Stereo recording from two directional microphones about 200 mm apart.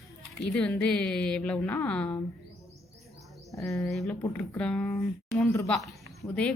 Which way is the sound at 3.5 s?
15° left (ahead or behind).